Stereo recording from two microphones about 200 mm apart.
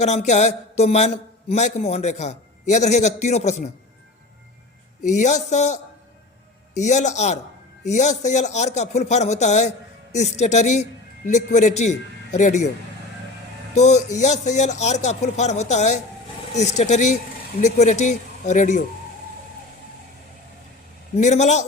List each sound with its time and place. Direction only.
0.0 s a man's voice: 35° left (ahead or behind)
5.0 s a man's voice: 35° left (ahead or behind)
13.7 s a man's voice: 35° left (ahead or behind)
21.2 s a man's voice: 35° left (ahead or behind)